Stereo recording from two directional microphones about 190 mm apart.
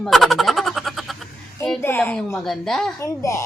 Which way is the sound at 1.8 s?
10° left (ahead or behind).